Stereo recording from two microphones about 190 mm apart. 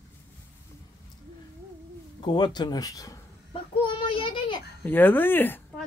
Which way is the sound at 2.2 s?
25° left (ahead or behind).